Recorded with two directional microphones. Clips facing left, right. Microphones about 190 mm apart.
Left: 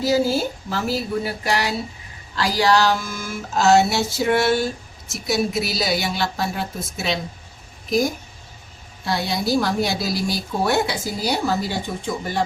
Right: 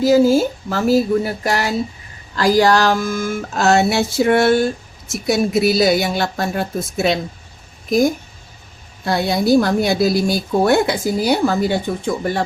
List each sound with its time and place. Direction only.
0.0 s music: 50° right (ahead or behind)
9.0 s music: 55° right (ahead or behind)